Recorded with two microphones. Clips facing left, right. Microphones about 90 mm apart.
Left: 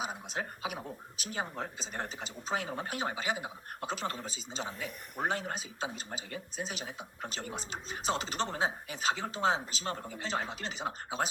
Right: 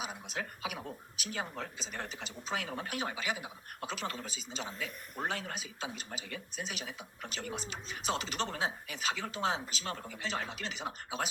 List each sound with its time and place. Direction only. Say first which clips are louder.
0.0 s speech: left 3 dB; 30° left (ahead or behind)